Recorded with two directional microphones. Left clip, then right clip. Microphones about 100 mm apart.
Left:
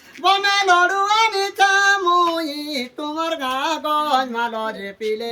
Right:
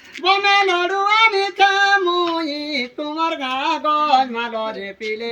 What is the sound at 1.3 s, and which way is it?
Female singing, 45° left (ahead or behind).